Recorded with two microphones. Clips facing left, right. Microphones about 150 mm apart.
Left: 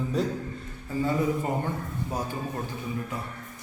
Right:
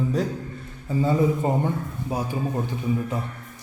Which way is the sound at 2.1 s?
10° right (ahead or behind).